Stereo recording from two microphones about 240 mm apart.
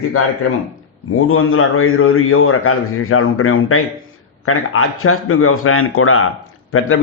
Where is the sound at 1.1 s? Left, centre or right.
Left.